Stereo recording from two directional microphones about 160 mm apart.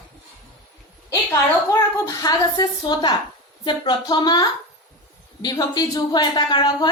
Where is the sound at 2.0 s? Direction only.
20° left (ahead or behind).